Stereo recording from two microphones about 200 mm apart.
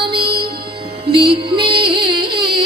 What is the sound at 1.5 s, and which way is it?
Music, 25° right (ahead or behind).